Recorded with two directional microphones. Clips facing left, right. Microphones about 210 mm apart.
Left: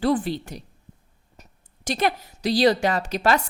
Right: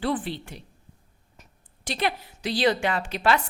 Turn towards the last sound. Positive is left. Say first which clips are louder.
# left 2 dB
turn(degrees=40)  # may be behind; listen again after turning